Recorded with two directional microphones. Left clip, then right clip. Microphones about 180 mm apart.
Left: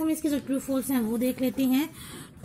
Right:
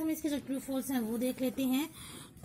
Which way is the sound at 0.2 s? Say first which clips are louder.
Left 7 dB; 10° right (ahead or behind).